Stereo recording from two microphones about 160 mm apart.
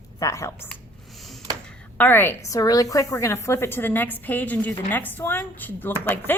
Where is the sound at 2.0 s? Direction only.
10° left (ahead or behind).